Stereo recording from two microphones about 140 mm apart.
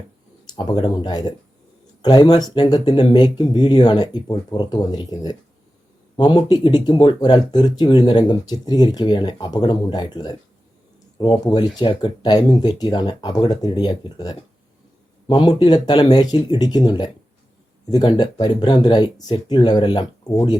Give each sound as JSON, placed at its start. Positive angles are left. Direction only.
{"t": 0.4, "sound": "speech", "side_deg": 30}
{"t": 18.2, "sound": "speech", "side_deg": 30}